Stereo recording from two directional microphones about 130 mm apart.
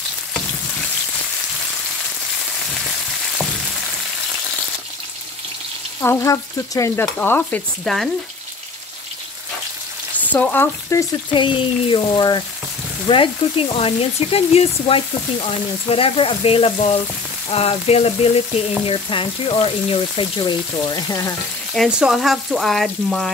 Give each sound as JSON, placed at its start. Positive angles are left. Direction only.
{"t": 6.0, "sound": "stir", "side_deg": 25}
{"t": 7.2, "sound": "frying", "side_deg": 15}
{"t": 7.8, "sound": "speech", "side_deg": 0}
{"t": 10.1, "sound": "frying", "side_deg": 10}
{"t": 11.3, "sound": "a sound", "side_deg": 40}
{"t": 13.1, "sound": "frying", "side_deg": 45}
{"t": 21.7, "sound": "speech", "side_deg": 0}